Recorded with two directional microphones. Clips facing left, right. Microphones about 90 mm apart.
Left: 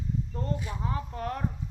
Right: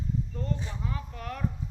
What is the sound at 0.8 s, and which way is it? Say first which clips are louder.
Speech: left 4 dB; 35° left (ahead or behind).